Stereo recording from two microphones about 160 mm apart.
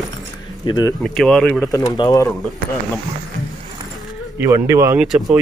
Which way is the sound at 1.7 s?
25° left (ahead or behind).